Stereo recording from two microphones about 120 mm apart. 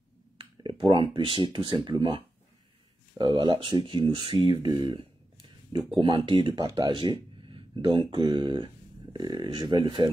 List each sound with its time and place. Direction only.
0.4 s speech: 40° right (ahead or behind)
4.4 s a sound: 45° right (ahead or behind)
5.9 s speech: 45° right (ahead or behind)